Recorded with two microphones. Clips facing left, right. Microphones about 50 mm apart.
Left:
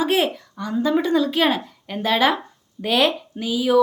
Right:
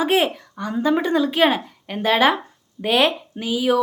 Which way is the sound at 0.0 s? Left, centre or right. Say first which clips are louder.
Right 1 dB; right.